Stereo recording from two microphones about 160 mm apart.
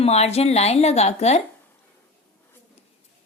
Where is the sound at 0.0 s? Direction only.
40° left (ahead or behind).